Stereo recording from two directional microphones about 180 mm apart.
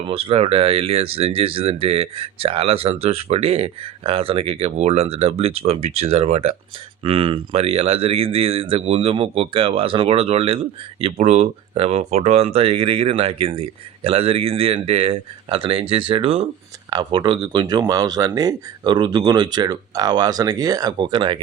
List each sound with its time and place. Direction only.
0.1 s speech: 30° right (ahead or behind)